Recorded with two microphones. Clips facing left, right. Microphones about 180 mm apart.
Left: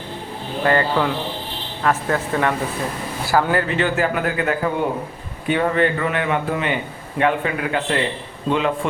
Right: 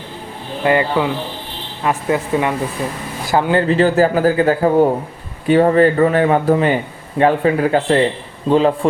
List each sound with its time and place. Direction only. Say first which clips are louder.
0.6 s speech: right 3 dB; 15° right (ahead or behind); by 8.9 s 35° right (ahead or behind)